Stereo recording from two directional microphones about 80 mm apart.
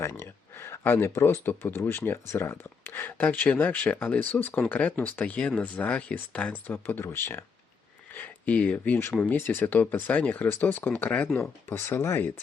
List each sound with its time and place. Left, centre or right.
0.0 s speech: left
8.1 s speech: centre